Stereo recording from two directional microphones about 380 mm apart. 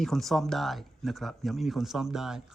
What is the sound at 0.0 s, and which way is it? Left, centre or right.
Speech, centre.